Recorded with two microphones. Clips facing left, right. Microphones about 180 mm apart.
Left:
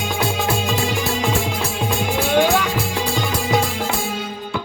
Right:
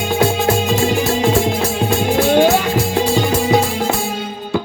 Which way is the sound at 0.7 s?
40° right (ahead or behind).